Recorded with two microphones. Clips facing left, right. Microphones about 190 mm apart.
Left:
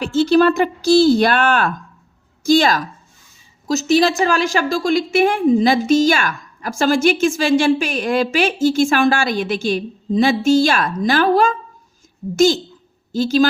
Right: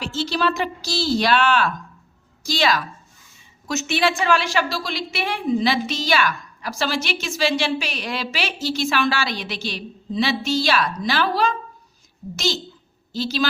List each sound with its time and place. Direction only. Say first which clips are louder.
0.0 s a woman's voice: left 10 dB; 55° left (ahead or behind)
13.1 s a woman's voice: left 8 dB; 50° left (ahead or behind)